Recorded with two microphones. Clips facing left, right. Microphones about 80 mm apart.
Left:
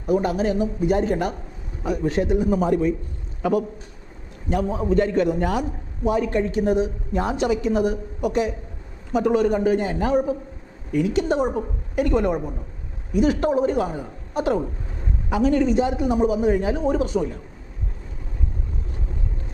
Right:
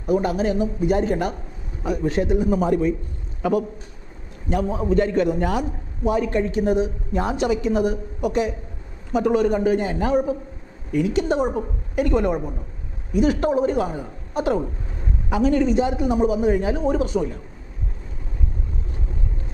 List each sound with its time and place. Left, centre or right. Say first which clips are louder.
0.0 s a man's voice: even; centre